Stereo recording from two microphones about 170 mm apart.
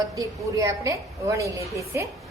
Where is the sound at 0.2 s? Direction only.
20° right (ahead or behind).